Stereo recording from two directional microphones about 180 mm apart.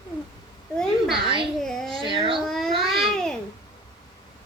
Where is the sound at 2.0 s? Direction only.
30° right (ahead or behind).